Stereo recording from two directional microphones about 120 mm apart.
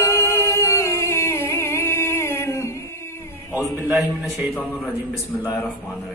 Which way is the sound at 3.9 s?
15° right (ahead or behind).